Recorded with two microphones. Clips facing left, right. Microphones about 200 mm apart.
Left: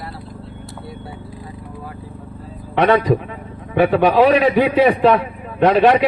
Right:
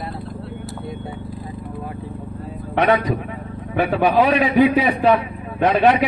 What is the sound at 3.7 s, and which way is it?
A man's voice, 60° left (ahead or behind).